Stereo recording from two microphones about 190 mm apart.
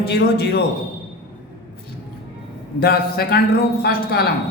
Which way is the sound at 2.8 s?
55° left (ahead or behind).